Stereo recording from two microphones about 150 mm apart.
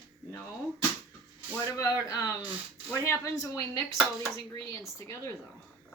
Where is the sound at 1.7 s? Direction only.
25° left (ahead or behind).